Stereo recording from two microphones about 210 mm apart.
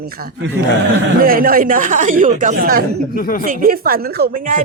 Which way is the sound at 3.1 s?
40° left (ahead or behind).